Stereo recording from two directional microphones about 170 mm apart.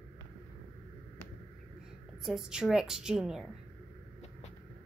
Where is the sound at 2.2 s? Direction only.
5° right (ahead or behind).